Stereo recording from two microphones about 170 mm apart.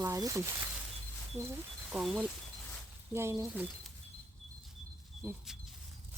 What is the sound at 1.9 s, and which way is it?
Speech, 5° right (ahead or behind).